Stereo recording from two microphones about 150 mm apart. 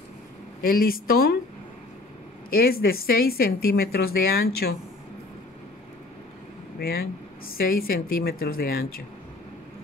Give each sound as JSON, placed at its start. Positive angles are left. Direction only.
{"t": 0.6, "sound": "a woman's voice", "side_deg": 80}
{"t": 2.5, "sound": "speech", "side_deg": 90}
{"t": 6.8, "sound": "a woman's voice", "side_deg": 85}